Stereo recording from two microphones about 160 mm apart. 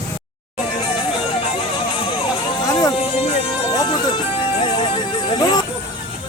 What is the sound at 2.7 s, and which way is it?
Music, 25° left (ahead or behind).